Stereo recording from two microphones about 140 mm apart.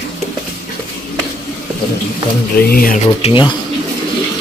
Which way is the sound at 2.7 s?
90° left.